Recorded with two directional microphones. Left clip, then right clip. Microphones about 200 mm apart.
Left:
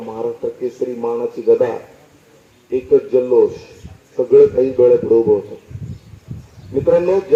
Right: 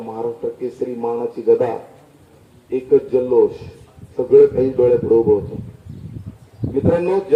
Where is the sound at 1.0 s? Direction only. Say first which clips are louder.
Left 1 dB; 15° right (ahead or behind).